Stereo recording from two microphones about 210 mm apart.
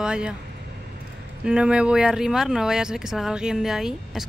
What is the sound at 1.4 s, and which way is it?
Speech, 5° right (ahead or behind).